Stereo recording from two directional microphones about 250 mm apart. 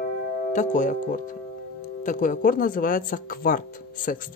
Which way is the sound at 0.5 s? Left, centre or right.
Left.